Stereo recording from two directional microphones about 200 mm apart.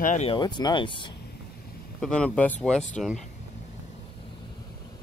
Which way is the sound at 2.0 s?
5° left (ahead or behind).